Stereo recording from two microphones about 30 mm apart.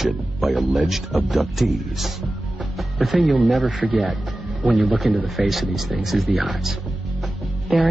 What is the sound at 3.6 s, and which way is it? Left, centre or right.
Speech, right.